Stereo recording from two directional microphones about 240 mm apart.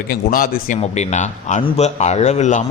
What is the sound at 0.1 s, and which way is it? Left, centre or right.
A man's voice, left.